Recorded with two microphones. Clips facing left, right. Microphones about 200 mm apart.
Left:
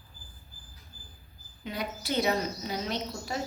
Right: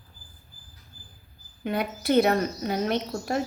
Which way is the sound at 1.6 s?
55° right (ahead or behind).